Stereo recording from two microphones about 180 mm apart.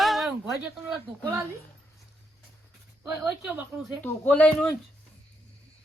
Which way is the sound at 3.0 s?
10° right (ahead or behind).